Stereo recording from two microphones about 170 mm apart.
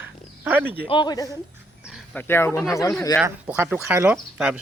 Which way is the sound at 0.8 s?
30° left (ahead or behind).